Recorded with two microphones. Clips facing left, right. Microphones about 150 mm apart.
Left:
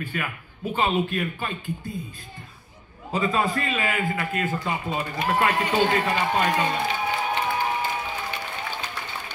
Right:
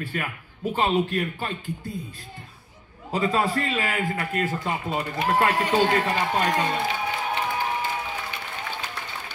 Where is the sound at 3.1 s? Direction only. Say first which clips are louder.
Right 1 dB; 35° right (ahead or behind).